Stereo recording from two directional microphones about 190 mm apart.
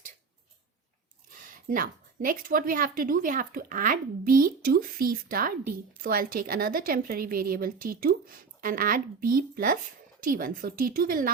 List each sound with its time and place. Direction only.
1.5 s a woman's voice: 45° right (ahead or behind)